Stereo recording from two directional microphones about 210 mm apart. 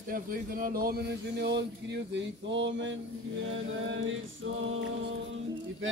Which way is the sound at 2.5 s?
60° right (ahead or behind).